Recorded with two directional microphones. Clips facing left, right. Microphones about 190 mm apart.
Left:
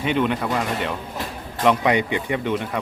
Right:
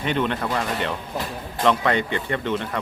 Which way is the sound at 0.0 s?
5° left (ahead or behind).